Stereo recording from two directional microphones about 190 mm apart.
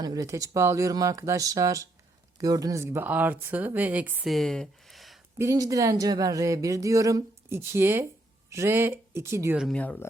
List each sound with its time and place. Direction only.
0.0 s speech: 20° right (ahead or behind); by 5.2 s centre (ahead or behind)
5.4 s speech: 20° right (ahead or behind)
9.6 s speech: 5° left (ahead or behind)